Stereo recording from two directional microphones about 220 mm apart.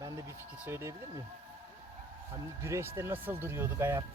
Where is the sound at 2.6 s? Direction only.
10° right (ahead or behind).